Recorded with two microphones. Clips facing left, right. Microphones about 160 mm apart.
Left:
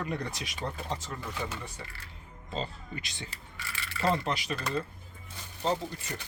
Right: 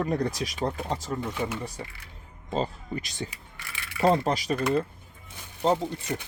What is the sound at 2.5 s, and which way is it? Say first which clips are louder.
Speech: right 7 dB; 45° right (ahead or behind).